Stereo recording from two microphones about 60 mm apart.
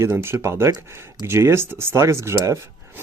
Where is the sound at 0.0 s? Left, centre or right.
Right.